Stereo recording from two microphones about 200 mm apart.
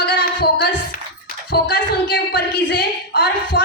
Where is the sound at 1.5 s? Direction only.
50° left (ahead or behind).